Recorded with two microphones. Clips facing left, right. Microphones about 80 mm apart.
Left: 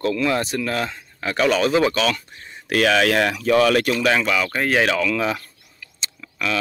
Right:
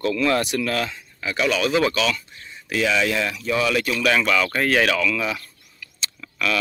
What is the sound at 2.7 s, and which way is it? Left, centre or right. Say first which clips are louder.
Speech: left 4 dB; left.